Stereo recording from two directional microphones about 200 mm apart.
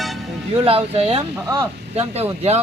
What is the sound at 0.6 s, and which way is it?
Speech, 30° right (ahead or behind).